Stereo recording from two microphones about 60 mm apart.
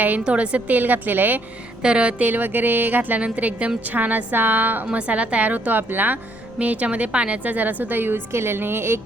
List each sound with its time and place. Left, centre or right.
0.3 s a woman's voice: right
1.8 s a woman's voice: centre; by 4.9 s right
4.9 s a woman's voice: centre; by 9.0 s right